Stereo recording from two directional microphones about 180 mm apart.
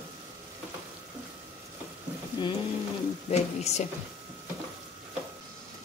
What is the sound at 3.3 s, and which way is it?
Sizzle, 40° left (ahead or behind).